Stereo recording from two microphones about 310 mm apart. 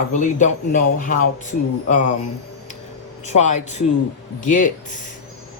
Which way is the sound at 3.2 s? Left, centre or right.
Left.